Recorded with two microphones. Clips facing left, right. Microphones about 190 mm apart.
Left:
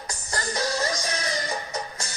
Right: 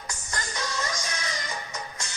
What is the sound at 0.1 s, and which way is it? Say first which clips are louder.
Music: left 6 dB; 35° left (ahead or behind).